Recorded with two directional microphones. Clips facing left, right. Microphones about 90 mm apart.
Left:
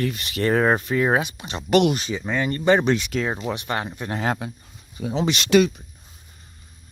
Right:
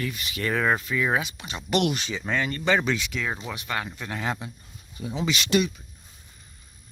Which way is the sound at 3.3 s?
25° left (ahead or behind).